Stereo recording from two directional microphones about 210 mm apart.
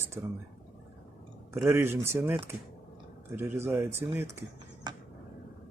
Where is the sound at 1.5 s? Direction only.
10° right (ahead or behind).